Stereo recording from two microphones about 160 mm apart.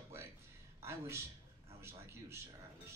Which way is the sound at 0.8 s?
15° right (ahead or behind).